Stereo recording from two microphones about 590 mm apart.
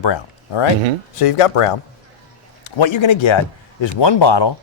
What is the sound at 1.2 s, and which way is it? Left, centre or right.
A man's voice, left.